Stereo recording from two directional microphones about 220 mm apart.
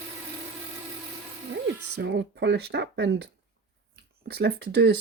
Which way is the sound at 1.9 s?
50° right (ahead or behind).